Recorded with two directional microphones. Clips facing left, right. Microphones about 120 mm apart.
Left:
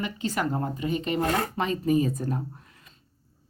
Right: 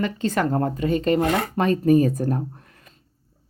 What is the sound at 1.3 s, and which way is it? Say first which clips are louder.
A woman's voice: right 5 dB; 60° right (ahead or behind).